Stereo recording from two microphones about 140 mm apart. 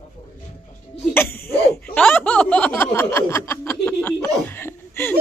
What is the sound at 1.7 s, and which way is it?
Snicker, 10° left (ahead or behind).